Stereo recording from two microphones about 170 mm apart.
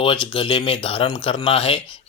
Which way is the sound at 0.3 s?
30° left (ahead or behind).